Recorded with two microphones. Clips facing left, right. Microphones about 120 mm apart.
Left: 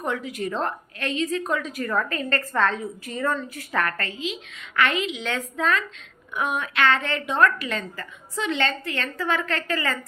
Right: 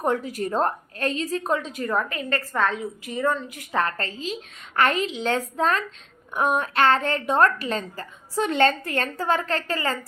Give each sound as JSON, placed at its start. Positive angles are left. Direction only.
{"t": 0.0, "sound": "a woman's voice", "side_deg": -40}